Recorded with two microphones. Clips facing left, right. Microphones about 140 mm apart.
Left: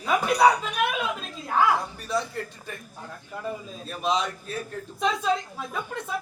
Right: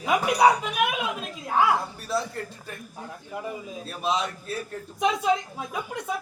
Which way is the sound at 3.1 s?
15° right (ahead or behind).